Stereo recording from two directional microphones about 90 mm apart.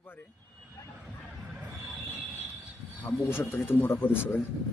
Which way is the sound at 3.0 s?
25° left (ahead or behind).